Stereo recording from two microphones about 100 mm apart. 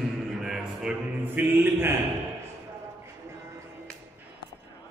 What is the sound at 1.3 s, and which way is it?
Chant, 20° right (ahead or behind).